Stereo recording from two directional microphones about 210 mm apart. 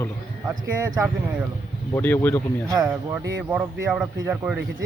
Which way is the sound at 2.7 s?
20° right (ahead or behind).